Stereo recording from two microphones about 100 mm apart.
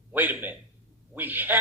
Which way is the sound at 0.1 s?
20° right (ahead or behind).